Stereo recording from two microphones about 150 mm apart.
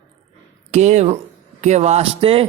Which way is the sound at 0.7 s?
50° right (ahead or behind).